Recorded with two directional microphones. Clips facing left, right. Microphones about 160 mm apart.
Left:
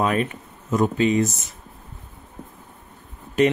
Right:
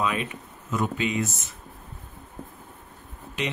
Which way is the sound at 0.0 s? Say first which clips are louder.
Left 6 dB; 45° left (ahead or behind).